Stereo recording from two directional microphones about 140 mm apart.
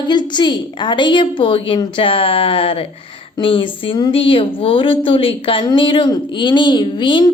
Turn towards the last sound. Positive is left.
turn(degrees=35)  # may be behind; listen again after turning